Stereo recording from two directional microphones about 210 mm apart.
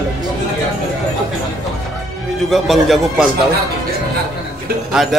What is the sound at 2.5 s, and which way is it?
Speech, centre (ahead or behind).